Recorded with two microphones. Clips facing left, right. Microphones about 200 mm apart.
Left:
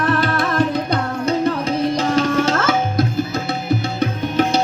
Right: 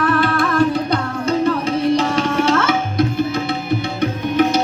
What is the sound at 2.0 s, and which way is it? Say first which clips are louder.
Tabla: left 1 dB; 40° left (ahead or behind).